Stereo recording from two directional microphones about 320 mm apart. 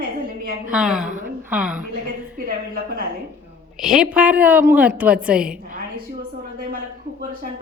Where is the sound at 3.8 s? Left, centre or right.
Centre.